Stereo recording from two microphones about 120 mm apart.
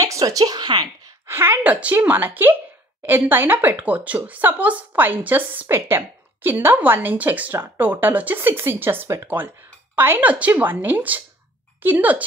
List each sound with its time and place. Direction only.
0.0 s a woman's voice: 30° right (ahead or behind)
1.2 s a woman's voice: 20° right (ahead or behind)